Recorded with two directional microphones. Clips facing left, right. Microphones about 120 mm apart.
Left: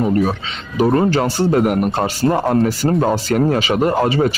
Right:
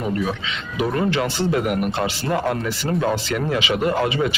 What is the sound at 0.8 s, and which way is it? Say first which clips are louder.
Speech: left 6 dB; 35° left (ahead or behind).